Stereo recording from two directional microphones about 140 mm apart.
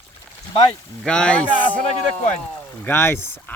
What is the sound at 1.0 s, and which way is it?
Speech, 5° left (ahead or behind).